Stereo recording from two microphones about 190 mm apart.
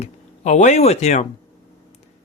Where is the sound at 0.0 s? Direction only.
40° left (ahead or behind).